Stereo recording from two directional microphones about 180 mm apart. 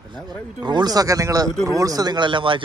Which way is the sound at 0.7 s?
20° right (ahead or behind).